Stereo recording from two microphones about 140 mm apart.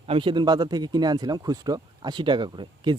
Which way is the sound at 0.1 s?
35° right (ahead or behind).